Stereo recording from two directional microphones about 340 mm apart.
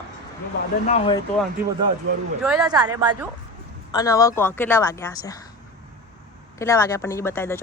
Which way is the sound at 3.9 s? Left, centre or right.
Centre.